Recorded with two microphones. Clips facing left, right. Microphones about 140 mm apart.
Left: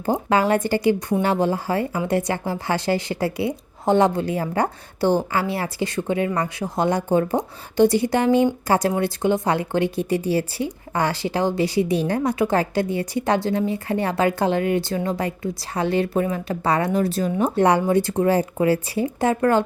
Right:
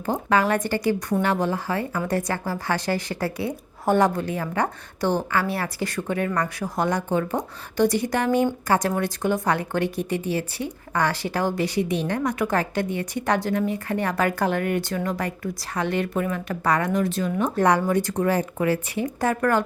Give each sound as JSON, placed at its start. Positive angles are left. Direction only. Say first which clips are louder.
{"t": 0.1, "sound": "speech", "louder": "left 2 dB", "side_deg": 30}